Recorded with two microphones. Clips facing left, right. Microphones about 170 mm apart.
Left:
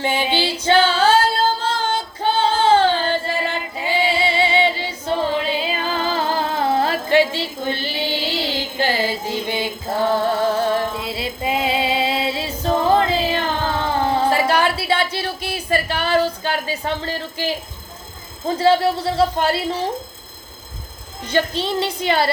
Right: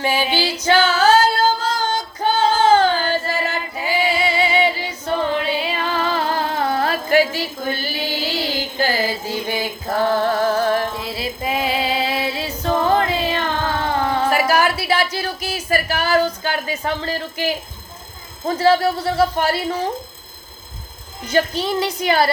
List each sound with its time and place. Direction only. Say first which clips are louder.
0.0 s female singing: even; 25° left (ahead or behind)
12.9 s music: left 1 dB; 30° left (ahead or behind)
18.4 s a man's voice: even; 30° left (ahead or behind)
21.2 s a man's voice: right 1 dB; 25° left (ahead or behind)